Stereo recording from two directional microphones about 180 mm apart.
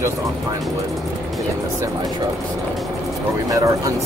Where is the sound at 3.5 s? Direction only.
20° right (ahead or behind).